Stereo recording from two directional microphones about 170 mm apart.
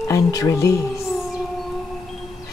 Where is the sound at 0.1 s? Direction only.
20° left (ahead or behind).